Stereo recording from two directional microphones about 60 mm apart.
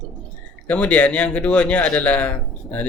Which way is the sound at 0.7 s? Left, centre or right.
Left.